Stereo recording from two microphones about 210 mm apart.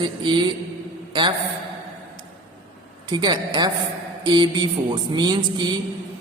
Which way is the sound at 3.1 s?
20° right (ahead or behind).